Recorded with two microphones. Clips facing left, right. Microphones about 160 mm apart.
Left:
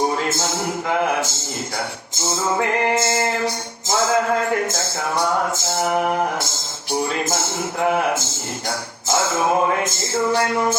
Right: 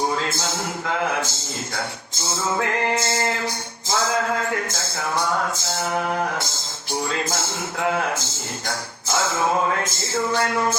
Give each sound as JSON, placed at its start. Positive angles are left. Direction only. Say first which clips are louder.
{"t": 0.2, "sound": "a man's voice", "louder": "left 3 dB", "side_deg": 20}
{"t": 3.8, "sound": "music", "louder": "left 3 dB", "side_deg": 20}
{"t": 4.7, "sound": "a man's voice", "louder": "left 3 dB", "side_deg": 20}